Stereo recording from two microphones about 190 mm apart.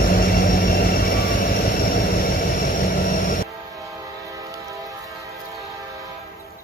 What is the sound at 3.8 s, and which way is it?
Train, 15° right (ahead or behind).